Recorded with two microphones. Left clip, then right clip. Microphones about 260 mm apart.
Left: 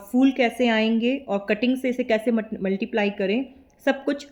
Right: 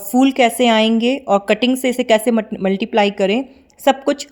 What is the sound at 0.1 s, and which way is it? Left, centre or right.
Speech, right.